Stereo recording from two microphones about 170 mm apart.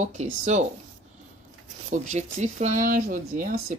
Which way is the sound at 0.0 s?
45° right (ahead or behind).